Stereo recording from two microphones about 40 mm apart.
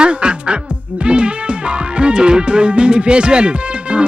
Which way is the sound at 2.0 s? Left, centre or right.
Right.